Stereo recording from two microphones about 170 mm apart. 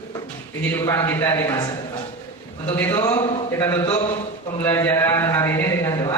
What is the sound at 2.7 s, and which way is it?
Speech, 15° left (ahead or behind).